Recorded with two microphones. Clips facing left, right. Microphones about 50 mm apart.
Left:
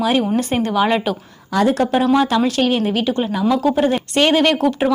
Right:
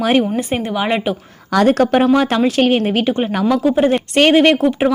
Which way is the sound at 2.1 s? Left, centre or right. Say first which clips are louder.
Right 2 dB; right.